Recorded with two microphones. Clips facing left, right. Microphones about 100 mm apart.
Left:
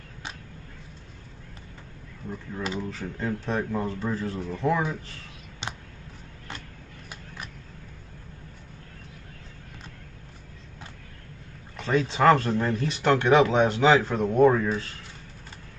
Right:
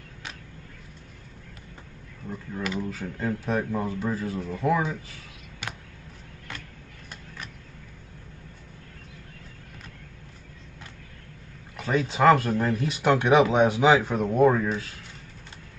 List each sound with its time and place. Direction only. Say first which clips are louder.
2.6 s speech: right 1 dB; 25° left (ahead or behind)
2.9 s speech: right 1 dB; 5° right (ahead or behind)
11.7 s speech: left 1 dB; 10° right (ahead or behind)